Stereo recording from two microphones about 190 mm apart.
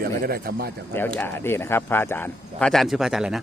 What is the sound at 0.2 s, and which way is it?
Speech, 55° right (ahead or behind).